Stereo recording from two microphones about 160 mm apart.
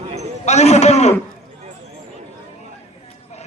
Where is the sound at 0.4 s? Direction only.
45° left (ahead or behind).